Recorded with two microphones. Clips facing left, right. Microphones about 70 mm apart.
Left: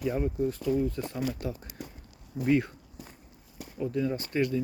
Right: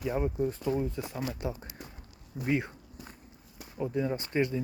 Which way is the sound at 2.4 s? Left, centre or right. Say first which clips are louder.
Left 5 dB; centre.